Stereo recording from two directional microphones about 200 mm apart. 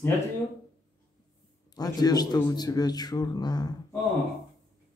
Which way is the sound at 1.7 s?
20° left (ahead or behind).